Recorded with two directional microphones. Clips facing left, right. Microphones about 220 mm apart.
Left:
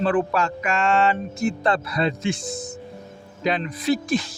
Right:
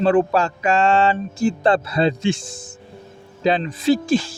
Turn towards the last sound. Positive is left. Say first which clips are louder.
# right 5 dB
turn(degrees=-30)  # may be behind; listen again after turning